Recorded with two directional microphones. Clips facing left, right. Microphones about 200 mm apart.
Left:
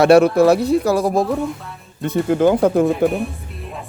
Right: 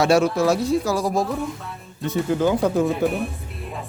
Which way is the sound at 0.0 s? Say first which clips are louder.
Left 7 dB; 60° left (ahead or behind).